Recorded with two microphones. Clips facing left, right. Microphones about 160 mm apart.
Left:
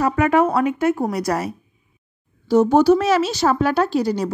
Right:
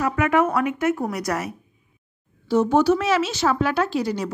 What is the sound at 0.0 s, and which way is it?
Speech, 35° left (ahead or behind).